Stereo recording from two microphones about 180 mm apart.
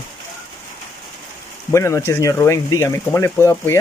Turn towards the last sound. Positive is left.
turn(degrees=15)  # may be behind; listen again after turning